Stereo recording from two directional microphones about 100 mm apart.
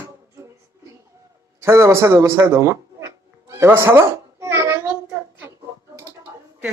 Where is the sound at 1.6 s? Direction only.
30° right (ahead or behind).